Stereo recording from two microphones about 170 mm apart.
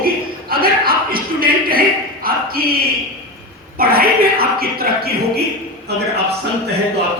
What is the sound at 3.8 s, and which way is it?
A man's voice, 60° right (ahead or behind).